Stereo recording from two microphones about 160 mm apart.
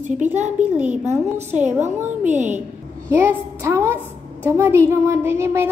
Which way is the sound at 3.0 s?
15° right (ahead or behind).